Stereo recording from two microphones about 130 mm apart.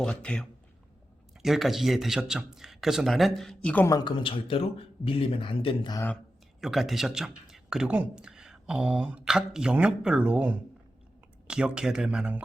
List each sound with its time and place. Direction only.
0.0 s speech: 10° left (ahead or behind)
1.4 s speech: centre (ahead or behind)
3.8 s speech: 30° left (ahead or behind)
6.6 s speech: centre (ahead or behind)